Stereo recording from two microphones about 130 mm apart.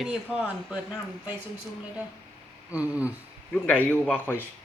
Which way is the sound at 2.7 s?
10° right (ahead or behind).